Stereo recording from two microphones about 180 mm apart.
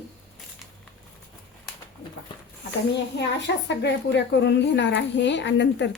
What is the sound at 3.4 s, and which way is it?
A woman's voice, 75° left (ahead or behind).